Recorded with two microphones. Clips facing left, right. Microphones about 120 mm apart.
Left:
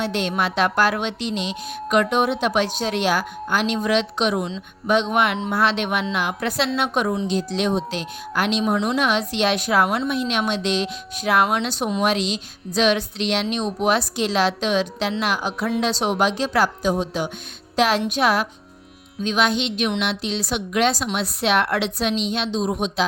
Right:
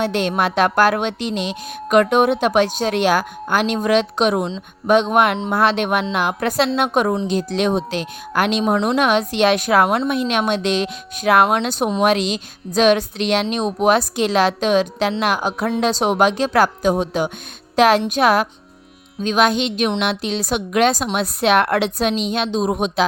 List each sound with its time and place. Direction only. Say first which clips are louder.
0.0 s speech: right 4 dB; 50° right (ahead or behind)